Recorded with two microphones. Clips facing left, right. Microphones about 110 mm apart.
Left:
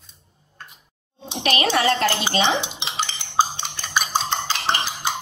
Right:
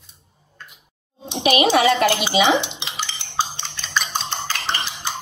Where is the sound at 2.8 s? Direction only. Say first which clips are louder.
Left 3 dB; 20° left (ahead or behind).